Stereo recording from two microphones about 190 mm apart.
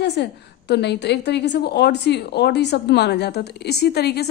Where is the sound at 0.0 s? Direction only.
65° left (ahead or behind).